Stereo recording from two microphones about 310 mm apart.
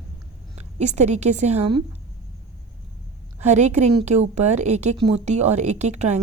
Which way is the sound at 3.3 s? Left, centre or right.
Right.